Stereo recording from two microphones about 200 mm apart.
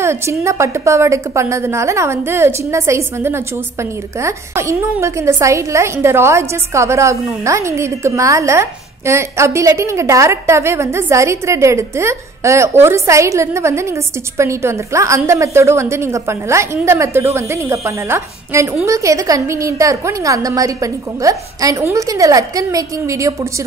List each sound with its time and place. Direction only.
0.0 s a woman's voice: 15° right (ahead or behind)